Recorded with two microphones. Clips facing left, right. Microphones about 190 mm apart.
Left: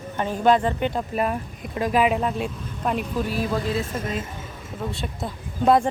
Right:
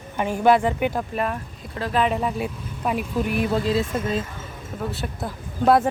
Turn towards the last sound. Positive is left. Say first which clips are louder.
# right 1 dB
turn(degrees=-5)  # may be behind; listen again after turning